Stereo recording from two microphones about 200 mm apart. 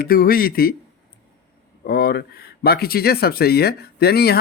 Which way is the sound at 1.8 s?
50° left (ahead or behind).